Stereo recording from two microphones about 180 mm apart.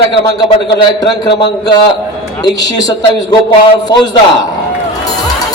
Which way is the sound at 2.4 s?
20° left (ahead or behind).